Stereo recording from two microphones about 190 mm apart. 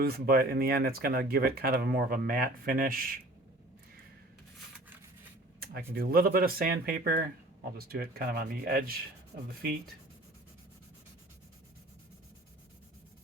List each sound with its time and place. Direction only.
0.0 s speech: 55° right (ahead or behind)
5.5 s speech: 50° right (ahead or behind)